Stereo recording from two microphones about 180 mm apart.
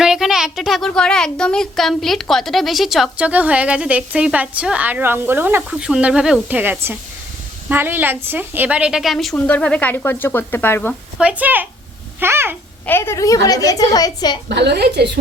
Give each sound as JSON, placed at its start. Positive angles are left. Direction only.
{"t": 0.0, "sound": "speech", "side_deg": 0}
{"t": 11.2, "sound": "speech", "side_deg": -5}
{"t": 12.8, "sound": "a woman's voice", "side_deg": 15}
{"t": 14.5, "sound": "a woman's voice", "side_deg": -70}